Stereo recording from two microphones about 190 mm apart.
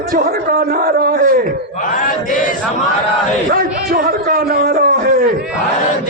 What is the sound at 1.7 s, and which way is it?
Chant, 45° left (ahead or behind).